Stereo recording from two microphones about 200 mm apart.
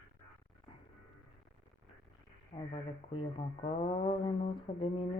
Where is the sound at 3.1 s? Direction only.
30° left (ahead or behind).